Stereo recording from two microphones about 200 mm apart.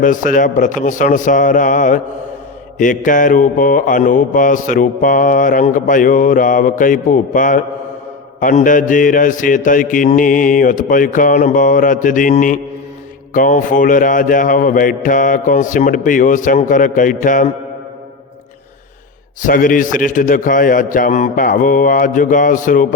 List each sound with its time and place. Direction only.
0.0 s mantra: 40° left (ahead or behind)
19.4 s mantra: 40° left (ahead or behind)